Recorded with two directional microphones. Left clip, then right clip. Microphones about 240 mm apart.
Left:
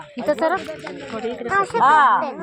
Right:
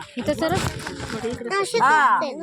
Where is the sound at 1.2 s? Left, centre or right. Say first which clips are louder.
Left 4 dB; right.